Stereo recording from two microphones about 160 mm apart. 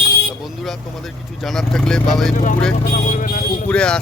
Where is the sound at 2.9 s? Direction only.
50° left (ahead or behind).